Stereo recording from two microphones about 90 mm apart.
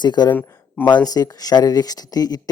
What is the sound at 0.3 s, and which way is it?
Speech, 20° left (ahead or behind).